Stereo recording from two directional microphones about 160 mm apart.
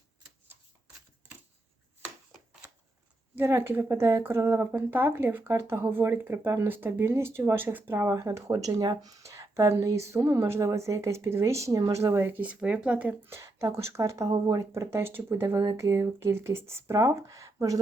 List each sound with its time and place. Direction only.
2.3 s shuffling cards: 5° right (ahead or behind)
3.3 s speech: 15° right (ahead or behind)